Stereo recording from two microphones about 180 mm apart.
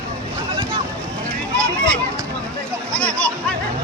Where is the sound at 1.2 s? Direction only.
5° left (ahead or behind).